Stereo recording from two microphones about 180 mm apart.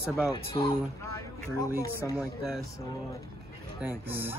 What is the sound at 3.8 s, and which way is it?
Speech, 10° right (ahead or behind).